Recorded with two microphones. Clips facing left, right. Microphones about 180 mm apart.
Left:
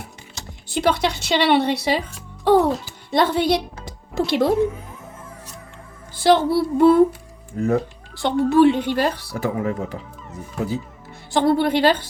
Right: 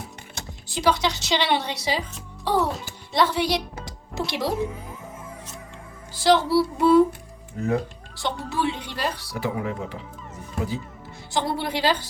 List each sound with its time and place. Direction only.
0.4 s music: 60° right (ahead or behind)
0.7 s speech: 55° left (ahead or behind)
3.1 s music: 55° left (ahead or behind)
4.3 s speech: 55° left (ahead or behind)
6.1 s speech: 55° left (ahead or behind)
11.3 s speech: 55° left (ahead or behind)